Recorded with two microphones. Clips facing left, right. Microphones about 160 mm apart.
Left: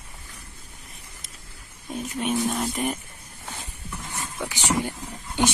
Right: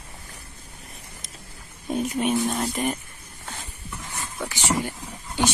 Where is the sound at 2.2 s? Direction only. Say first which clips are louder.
Left 1 dB; centre (ahead or behind).